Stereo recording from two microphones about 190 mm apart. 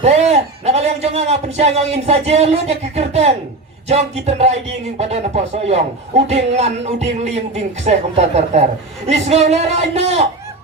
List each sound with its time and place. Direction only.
0.0 s speech: 35° right (ahead or behind)